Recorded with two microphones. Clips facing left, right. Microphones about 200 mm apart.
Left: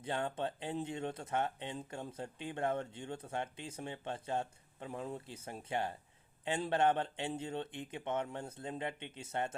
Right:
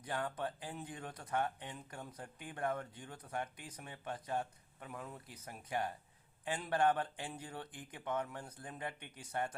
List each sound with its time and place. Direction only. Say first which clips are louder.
0.0 s speech: left 3 dB; 25° left (ahead or behind)